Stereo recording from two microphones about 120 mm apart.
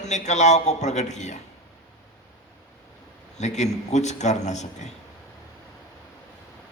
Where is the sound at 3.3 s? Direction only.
75° left (ahead or behind).